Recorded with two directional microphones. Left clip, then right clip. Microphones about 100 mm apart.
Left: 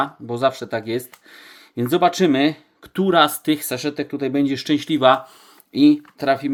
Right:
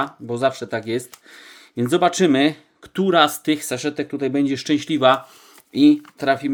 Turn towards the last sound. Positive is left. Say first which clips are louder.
# even
turn(degrees=-10)  # may be behind; listen again after turning